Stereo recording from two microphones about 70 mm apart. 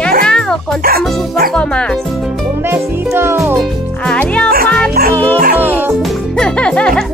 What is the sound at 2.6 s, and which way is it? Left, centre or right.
Music, right.